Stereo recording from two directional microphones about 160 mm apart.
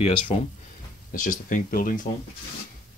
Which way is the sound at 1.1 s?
55° left (ahead or behind).